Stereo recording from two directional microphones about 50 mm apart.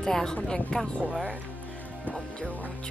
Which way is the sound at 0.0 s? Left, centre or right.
Centre.